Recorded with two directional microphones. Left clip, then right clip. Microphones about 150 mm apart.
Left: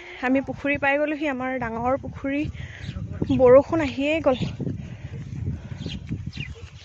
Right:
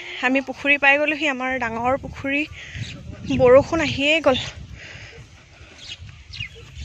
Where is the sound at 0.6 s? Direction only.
10° left (ahead or behind).